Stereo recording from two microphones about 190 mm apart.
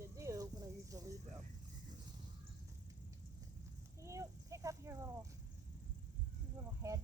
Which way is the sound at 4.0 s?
15° right (ahead or behind).